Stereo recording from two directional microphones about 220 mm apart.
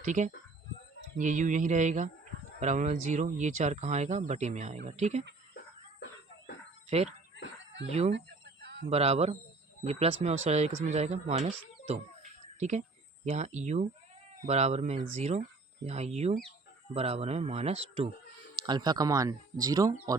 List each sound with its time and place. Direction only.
0.0 s speech: 35° right (ahead or behind)
7.9 s speech: 30° right (ahead or behind)
8.1 s chicken: 50° right (ahead or behind)
8.9 s speech: 30° right (ahead or behind)